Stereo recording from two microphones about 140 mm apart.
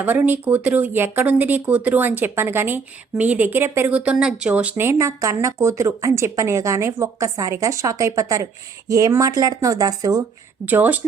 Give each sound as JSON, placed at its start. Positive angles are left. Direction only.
{"t": 0.0, "sound": "speech", "side_deg": -15}
{"t": 10.7, "sound": "speech", "side_deg": -10}